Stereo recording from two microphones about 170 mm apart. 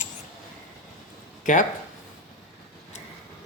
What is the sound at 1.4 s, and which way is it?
Speech, 50° left (ahead or behind).